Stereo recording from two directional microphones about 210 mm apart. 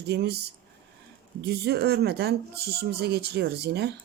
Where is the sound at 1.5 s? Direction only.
50° right (ahead or behind).